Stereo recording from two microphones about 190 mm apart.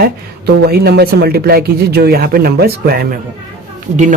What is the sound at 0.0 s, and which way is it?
Speech, 55° right (ahead or behind).